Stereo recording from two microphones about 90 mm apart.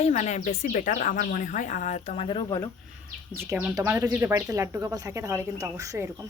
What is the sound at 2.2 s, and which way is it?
Speech, 70° left (ahead or behind).